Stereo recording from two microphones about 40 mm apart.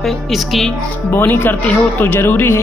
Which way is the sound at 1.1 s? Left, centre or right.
Left.